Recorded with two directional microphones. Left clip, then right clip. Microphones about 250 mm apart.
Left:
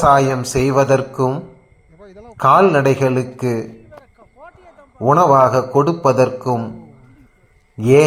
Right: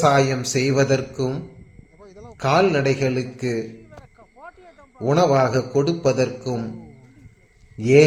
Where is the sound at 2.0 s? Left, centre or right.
Centre.